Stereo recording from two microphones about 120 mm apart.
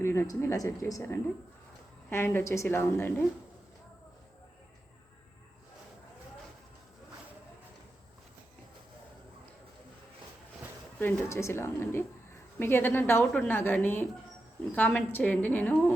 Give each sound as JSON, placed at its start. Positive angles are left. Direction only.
{"t": 0.0, "sound": "a woman's voice", "side_deg": 20}
{"t": 2.0, "sound": "a woman's voice", "side_deg": 20}
{"t": 11.0, "sound": "a woman's voice", "side_deg": 20}